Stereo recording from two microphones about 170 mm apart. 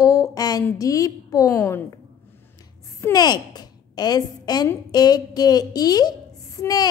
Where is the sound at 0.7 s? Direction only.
20° left (ahead or behind).